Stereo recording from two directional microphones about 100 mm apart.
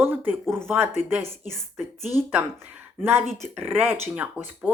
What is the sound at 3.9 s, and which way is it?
Speech, 15° right (ahead or behind).